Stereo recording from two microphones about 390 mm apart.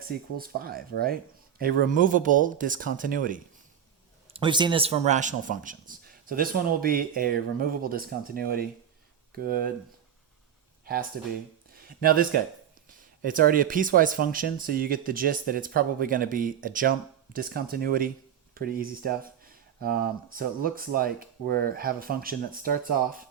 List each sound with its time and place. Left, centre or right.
0.1 s speech: right
11.7 s speech: right